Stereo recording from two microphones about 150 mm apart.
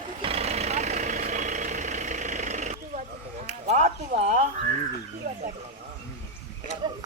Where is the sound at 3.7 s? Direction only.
60° right (ahead or behind).